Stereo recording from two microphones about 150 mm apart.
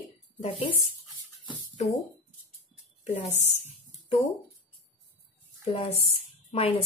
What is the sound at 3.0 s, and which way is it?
Speech, 45° left (ahead or behind).